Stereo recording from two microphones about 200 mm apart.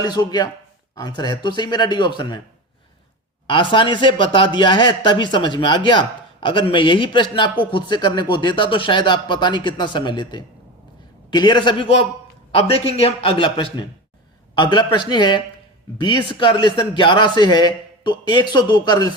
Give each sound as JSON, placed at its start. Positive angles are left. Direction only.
{"t": 0.0, "sound": "a man's voice", "side_deg": 20}
{"t": 3.4, "sound": "a man's voice", "side_deg": 25}